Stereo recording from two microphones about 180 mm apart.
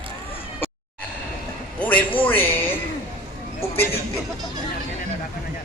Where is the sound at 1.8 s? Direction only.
10° left (ahead or behind).